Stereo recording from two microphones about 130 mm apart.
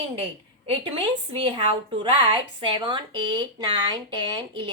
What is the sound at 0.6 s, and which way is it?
A woman's voice, 45° right (ahead or behind).